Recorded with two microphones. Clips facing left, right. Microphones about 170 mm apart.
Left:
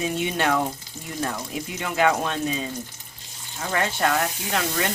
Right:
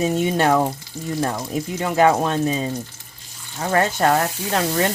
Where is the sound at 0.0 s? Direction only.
40° right (ahead or behind).